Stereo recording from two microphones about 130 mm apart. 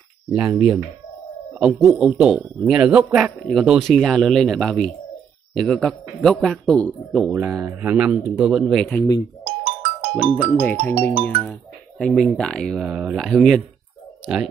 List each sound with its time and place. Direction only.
0.3 s a man's voice: 10° right (ahead or behind)
7.3 s a man's voice: 10° right (ahead or behind)
9.4 s music: 40° right (ahead or behind)
10.3 s speech: 10° left (ahead or behind)
12.0 s speech: centre (ahead or behind)
12.8 s speech: 10° right (ahead or behind)